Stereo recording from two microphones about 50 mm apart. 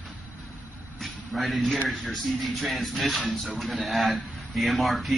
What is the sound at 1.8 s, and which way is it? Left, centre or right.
Speech, centre.